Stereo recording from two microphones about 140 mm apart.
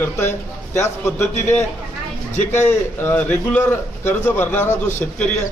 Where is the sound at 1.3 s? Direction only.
55° left (ahead or behind).